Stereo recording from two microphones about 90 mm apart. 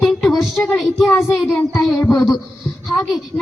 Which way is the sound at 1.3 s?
30° left (ahead or behind).